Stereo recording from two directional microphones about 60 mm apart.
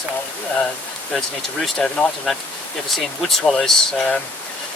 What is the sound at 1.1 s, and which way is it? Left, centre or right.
Speech, centre.